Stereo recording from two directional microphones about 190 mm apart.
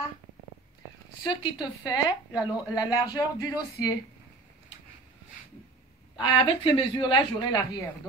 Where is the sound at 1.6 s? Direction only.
20° left (ahead or behind).